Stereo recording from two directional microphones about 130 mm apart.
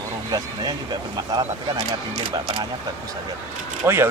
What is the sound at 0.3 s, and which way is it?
Speech, 30° right (ahead or behind).